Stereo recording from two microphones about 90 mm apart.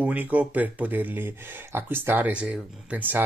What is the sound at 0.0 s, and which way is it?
Speech, 15° right (ahead or behind).